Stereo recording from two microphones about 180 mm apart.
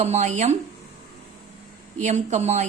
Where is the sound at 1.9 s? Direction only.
40° right (ahead or behind).